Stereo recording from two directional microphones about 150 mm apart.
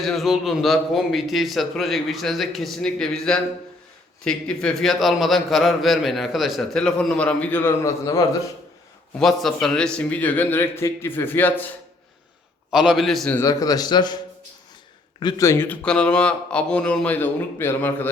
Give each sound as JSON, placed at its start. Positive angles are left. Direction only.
{"t": 0.0, "sound": "a man's voice", "side_deg": 0}
{"t": 9.1, "sound": "speech", "side_deg": 5}
{"t": 12.7, "sound": "a man's voice", "side_deg": -5}
{"t": 13.3, "sound": "a man's voice", "side_deg": 20}
{"t": 15.2, "sound": "speech", "side_deg": 25}